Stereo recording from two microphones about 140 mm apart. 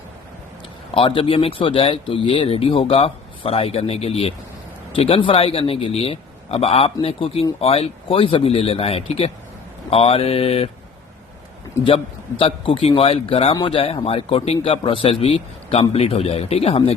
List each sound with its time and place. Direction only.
0.9 s a man's voice: 40° left (ahead or behind)
12.4 s a man's voice: 40° left (ahead or behind)